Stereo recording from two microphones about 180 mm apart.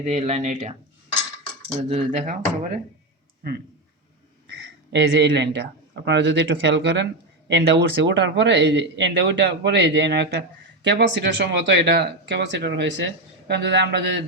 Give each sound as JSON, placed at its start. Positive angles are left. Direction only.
{"t": 0.0, "sound": "speech", "side_deg": -40}
{"t": 1.9, "sound": "speech", "side_deg": -45}
{"t": 4.4, "sound": "speech", "side_deg": -70}